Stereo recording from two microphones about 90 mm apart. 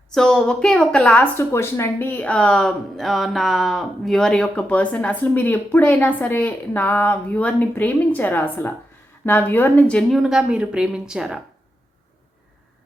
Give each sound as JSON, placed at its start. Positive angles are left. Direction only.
{"t": 0.1, "sound": "speech", "side_deg": 10}
{"t": 1.4, "sound": "a woman's voice", "side_deg": 30}
{"t": 10.1, "sound": "a woman's voice", "side_deg": 0}